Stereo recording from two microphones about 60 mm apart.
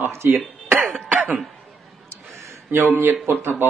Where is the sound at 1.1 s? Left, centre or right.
Right.